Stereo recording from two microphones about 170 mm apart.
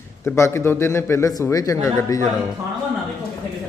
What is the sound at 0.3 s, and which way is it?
A man's voice, 15° left (ahead or behind).